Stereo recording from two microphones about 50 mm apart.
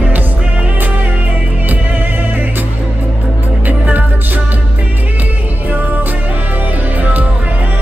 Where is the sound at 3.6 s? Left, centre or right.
Right.